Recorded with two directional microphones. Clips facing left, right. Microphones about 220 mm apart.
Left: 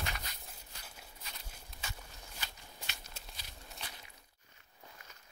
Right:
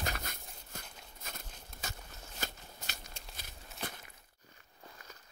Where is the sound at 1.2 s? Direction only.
50° right (ahead or behind).